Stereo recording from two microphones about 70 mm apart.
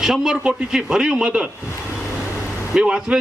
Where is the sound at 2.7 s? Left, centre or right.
Centre.